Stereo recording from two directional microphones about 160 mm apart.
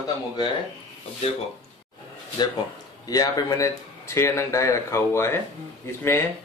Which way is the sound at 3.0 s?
25° left (ahead or behind).